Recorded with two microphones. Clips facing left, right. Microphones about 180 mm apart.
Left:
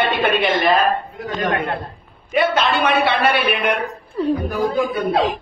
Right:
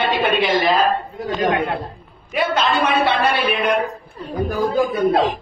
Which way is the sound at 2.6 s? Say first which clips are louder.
Even; 65° left (ahead or behind).